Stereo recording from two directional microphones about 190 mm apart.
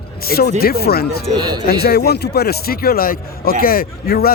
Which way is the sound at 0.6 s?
55° left (ahead or behind).